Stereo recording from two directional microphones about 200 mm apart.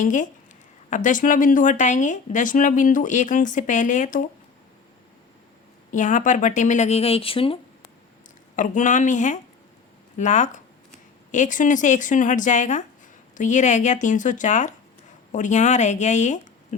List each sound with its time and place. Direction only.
0.0 s speech: 40° left (ahead or behind)
5.9 s speech: 40° left (ahead or behind)
8.5 s speech: 40° left (ahead or behind)